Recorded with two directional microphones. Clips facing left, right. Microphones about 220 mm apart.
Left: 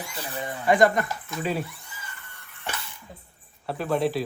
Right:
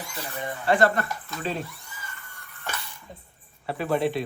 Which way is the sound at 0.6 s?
15° left (ahead or behind).